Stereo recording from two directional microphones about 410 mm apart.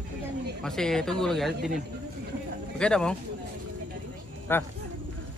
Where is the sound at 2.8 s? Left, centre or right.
Centre.